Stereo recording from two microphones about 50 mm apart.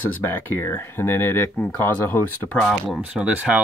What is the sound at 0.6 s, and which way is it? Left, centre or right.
Speech, left.